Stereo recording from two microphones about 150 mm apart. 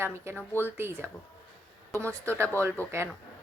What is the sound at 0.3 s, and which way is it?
Speech, 15° left (ahead or behind).